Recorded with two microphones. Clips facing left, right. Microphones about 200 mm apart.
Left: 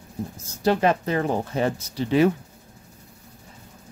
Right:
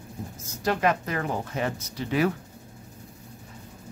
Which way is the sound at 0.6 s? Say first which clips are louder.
Left 4 dB; 30° left (ahead or behind).